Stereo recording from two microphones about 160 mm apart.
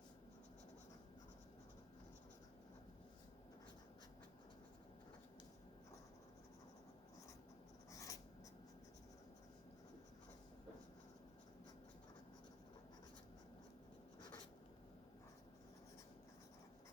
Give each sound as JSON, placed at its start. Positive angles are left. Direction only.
{"t": 7.9, "sound": "writing", "side_deg": 20}